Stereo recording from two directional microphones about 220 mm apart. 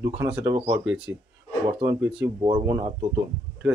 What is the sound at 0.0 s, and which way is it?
Speech, 15° right (ahead or behind).